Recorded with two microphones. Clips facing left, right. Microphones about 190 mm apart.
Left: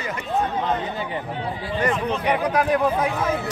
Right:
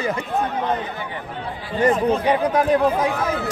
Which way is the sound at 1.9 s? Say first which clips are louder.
Right 5 dB; 40° right (ahead or behind).